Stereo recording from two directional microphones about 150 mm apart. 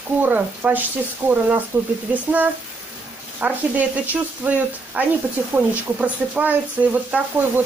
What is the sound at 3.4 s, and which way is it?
Speech, 10° right (ahead or behind).